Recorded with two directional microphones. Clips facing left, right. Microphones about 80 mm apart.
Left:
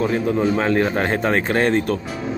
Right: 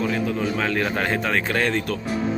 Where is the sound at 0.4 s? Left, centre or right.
Left.